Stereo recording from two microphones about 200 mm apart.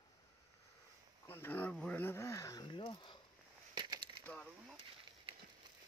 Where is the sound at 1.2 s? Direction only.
10° left (ahead or behind).